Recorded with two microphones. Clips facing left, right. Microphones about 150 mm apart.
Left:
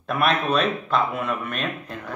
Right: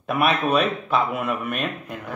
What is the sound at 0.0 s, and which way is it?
Speech, 10° right (ahead or behind).